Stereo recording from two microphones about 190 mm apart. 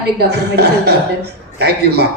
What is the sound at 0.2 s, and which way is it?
A man's voice, 60° right (ahead or behind).